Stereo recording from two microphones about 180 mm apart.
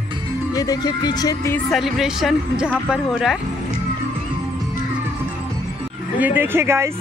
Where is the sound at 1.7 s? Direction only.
Centre (ahead or behind).